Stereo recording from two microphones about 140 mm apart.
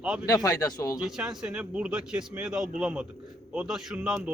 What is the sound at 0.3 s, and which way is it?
Speech, 25° left (ahead or behind).